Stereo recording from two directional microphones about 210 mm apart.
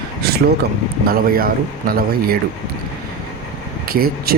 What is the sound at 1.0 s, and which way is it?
Speech, 45° right (ahead or behind).